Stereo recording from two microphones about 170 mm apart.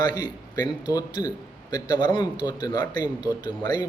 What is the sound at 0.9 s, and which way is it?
Speech, 25° left (ahead or behind).